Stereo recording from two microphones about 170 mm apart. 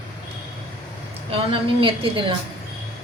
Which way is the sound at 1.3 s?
30° right (ahead or behind).